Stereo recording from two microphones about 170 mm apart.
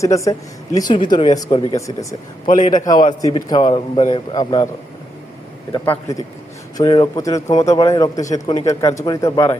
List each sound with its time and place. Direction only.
0.0 s speech: 20° left (ahead or behind)
5.8 s a man's voice: 15° left (ahead or behind)